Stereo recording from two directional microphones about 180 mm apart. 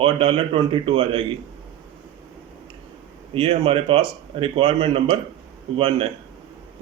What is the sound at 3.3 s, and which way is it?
A man's voice, 30° right (ahead or behind).